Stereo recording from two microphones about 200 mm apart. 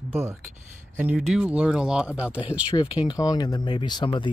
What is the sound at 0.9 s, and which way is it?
Speech, 10° right (ahead or behind).